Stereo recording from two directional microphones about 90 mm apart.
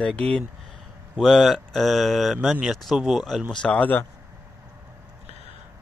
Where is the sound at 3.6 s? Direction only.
15° left (ahead or behind).